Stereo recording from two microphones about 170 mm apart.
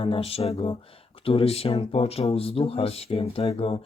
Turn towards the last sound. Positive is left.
turn(degrees=35)  # may be behind; listen again after turning